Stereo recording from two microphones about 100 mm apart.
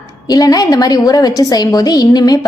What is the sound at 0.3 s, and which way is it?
A woman's voice, 40° left (ahead or behind).